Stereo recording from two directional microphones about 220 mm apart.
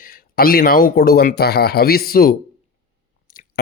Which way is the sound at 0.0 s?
40° left (ahead or behind).